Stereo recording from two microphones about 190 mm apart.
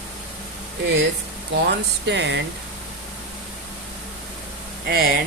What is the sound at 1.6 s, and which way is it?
Speech, 65° right (ahead or behind).